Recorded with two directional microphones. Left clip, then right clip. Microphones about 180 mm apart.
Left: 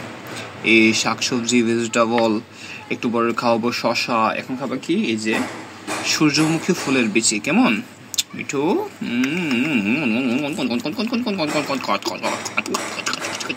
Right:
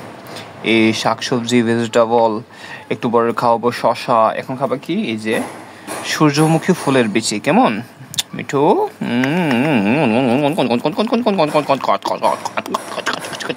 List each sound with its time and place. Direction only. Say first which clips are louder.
0.7 s speech: right 1 dB; 30° right (ahead or behind)